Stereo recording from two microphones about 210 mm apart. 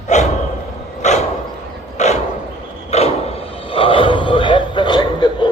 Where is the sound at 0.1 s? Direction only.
35° left (ahead or behind).